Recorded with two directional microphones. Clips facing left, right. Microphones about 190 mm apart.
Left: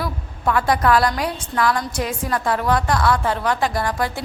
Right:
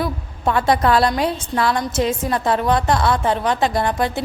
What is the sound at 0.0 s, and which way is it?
A woman's voice, 25° right (ahead or behind).